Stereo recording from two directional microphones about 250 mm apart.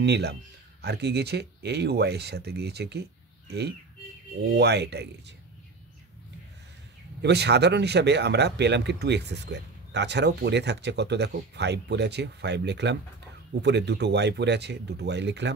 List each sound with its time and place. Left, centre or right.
0.0 s speech: right
7.2 s speech: right